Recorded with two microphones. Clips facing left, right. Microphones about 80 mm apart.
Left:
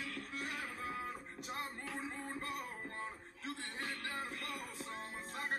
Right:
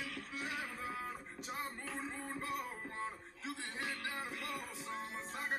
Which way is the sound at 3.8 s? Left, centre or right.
Centre.